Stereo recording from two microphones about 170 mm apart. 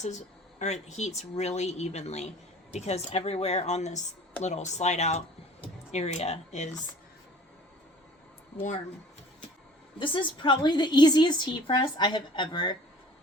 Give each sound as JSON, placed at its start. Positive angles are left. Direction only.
{"t": 0.0, "sound": "speech", "side_deg": 45}
{"t": 10.0, "sound": "a woman's voice", "side_deg": 30}